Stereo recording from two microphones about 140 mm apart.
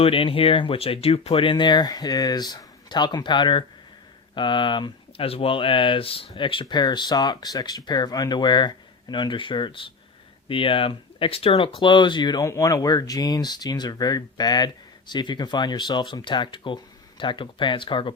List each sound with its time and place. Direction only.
0.0 s speech: 40° left (ahead or behind)